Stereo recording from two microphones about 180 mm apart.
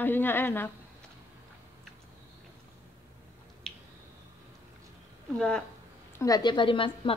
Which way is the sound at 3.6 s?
5° left (ahead or behind).